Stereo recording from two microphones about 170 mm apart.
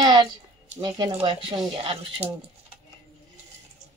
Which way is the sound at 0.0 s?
25° right (ahead or behind).